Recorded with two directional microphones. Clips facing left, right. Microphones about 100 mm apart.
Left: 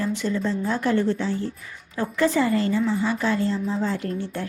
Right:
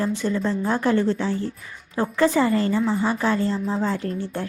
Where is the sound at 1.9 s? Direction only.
30° right (ahead or behind).